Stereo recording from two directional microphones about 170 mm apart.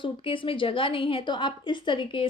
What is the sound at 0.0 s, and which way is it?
A woman's voice, 30° left (ahead or behind).